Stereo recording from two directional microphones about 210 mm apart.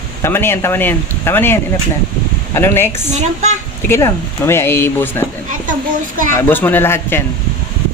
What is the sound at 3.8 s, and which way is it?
Speech, 10° left (ahead or behind).